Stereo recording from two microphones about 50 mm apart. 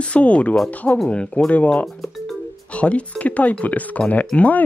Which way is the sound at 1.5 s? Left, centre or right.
Left.